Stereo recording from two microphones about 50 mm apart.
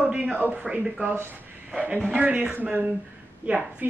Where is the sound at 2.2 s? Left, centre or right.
Right.